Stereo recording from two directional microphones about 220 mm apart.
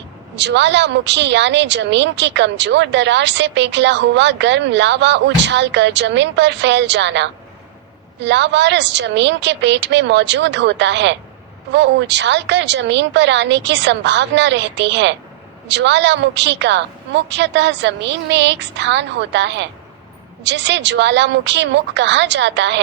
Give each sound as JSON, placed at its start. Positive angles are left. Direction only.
{"t": 0.3, "sound": "speech", "side_deg": -50}